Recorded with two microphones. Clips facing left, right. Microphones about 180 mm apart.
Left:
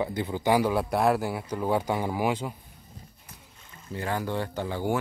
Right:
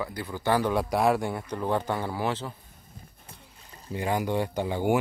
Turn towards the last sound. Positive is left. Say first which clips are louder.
# right 3 dB
turn(degrees=-15)  # may be behind; listen again after turning